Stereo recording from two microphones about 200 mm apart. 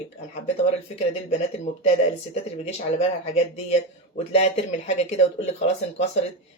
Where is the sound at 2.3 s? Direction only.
30° left (ahead or behind).